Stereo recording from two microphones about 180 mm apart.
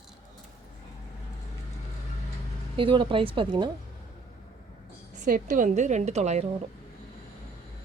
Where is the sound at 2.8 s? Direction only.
30° right (ahead or behind).